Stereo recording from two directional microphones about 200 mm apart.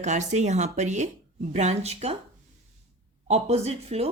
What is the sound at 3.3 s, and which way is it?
Speech, 30° right (ahead or behind).